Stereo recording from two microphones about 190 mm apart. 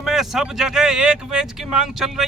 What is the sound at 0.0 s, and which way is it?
Speech, centre (ahead or behind).